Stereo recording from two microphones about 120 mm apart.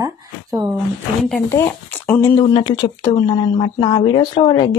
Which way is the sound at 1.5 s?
25° left (ahead or behind).